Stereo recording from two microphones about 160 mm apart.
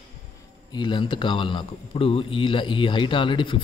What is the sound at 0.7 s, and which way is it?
Speech, 30° left (ahead or behind).